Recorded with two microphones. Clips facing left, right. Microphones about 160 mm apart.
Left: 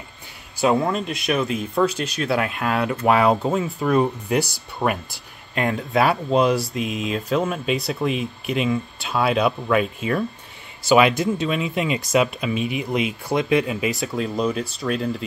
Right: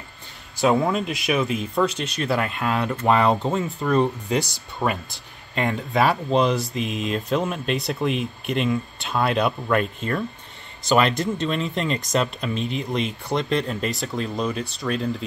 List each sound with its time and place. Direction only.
0.6 s speech: centre (ahead or behind)